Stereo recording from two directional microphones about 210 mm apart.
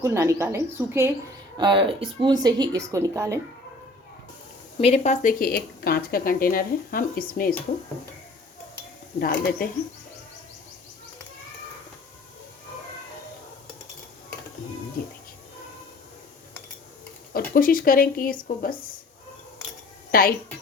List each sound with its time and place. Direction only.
0.0 s a woman's voice: 15° right (ahead or behind)
4.8 s speech: 30° left (ahead or behind)
9.2 s speech: 45° left (ahead or behind)
17.5 s speech: 40° left (ahead or behind)
20.1 s speech: 45° left (ahead or behind)